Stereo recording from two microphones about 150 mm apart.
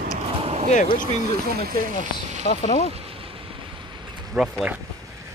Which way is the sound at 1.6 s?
75° right (ahead or behind).